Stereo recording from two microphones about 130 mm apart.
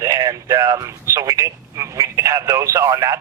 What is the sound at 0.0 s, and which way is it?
A man's voice, 25° right (ahead or behind).